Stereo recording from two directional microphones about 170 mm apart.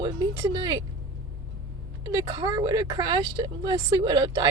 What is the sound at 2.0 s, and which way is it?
Speech, 25° right (ahead or behind).